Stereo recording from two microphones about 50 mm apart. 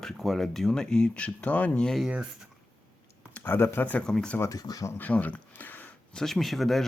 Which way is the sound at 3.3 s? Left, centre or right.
Left.